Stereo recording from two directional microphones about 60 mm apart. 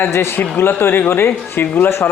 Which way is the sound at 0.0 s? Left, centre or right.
Left.